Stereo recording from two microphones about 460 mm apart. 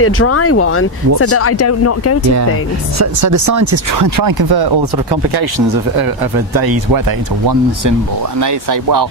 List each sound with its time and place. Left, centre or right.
0.0 s speech: left
3.0 s speech: right
8.4 s speech: right